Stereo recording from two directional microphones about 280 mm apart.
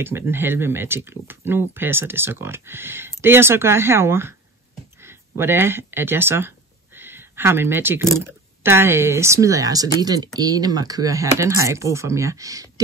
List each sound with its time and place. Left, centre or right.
0.0 s speech: centre